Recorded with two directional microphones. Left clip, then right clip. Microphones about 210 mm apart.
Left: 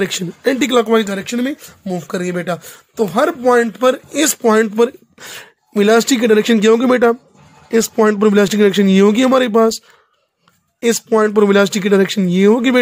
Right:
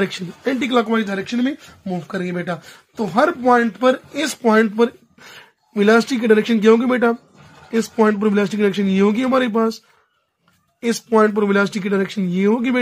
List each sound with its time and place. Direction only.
0.0 s speech: 50° left (ahead or behind)